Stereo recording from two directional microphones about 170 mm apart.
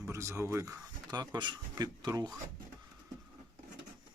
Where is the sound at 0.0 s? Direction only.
15° right (ahead or behind).